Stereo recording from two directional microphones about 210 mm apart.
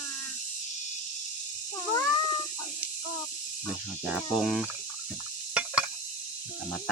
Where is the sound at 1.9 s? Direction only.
20° left (ahead or behind).